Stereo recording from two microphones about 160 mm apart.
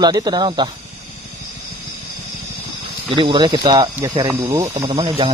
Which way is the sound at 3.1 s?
30° right (ahead or behind).